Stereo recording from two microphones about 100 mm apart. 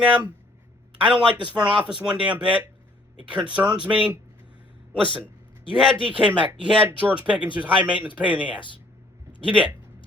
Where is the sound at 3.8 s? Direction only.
10° right (ahead or behind).